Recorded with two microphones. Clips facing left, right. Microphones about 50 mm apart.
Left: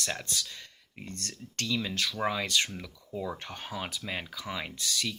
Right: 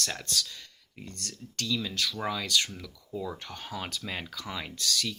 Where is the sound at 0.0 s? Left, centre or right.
Centre.